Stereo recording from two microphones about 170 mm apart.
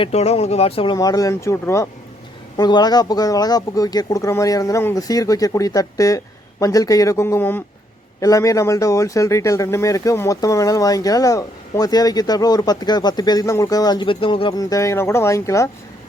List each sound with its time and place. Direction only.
0.0 s speech: 40° left (ahead or behind)
0.9 s speech: 20° left (ahead or behind)